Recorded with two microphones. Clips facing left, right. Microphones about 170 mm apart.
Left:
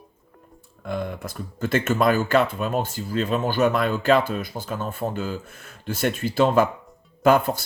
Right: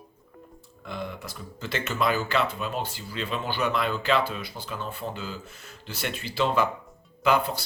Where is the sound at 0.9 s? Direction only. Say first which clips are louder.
Left 6 dB; 50° left (ahead or behind).